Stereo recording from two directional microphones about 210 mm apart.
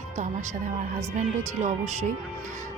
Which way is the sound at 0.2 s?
35° right (ahead or behind).